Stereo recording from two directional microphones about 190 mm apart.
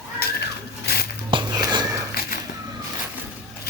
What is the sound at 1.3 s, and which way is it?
Wheeze, 25° right (ahead or behind).